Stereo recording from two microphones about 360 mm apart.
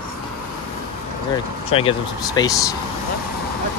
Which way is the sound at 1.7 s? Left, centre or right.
Centre.